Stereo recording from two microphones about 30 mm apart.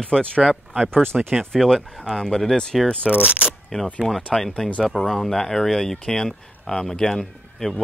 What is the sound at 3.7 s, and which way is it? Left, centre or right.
Speech, left.